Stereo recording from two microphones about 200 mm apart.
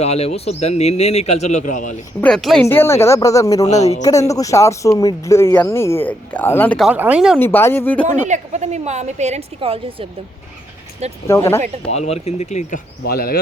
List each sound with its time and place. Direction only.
0.0 s a man's voice: 35° left (ahead or behind)
2.2 s speech: centre (ahead or behind)
7.3 s speech: 10° left (ahead or behind)
8.0 s a woman's voice: 35° right (ahead or behind)
11.3 s speech: 15° left (ahead or behind)
11.9 s a man's voice: 30° left (ahead or behind)
13.1 s speech: 50° left (ahead or behind)